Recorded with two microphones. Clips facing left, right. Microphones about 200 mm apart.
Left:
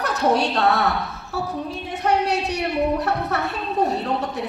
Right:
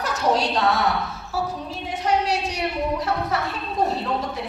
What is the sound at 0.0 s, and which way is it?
A woman's voice, 65° left (ahead or behind).